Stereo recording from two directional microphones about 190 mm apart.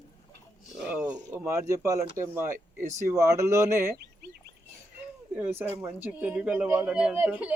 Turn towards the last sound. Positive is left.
turn(degrees=-5)  # may be behind; listen again after turning